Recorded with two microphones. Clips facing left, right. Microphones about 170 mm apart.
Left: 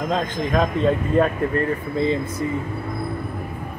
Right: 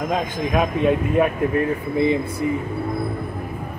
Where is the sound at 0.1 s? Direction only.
10° right (ahead or behind).